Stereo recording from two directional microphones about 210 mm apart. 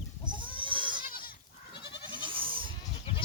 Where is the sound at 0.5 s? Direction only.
25° right (ahead or behind).